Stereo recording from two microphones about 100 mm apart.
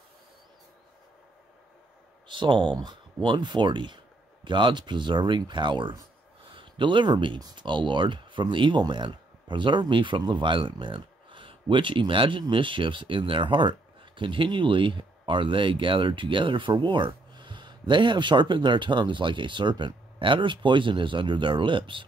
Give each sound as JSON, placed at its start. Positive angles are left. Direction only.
{"t": 2.2, "sound": "speech", "side_deg": -55}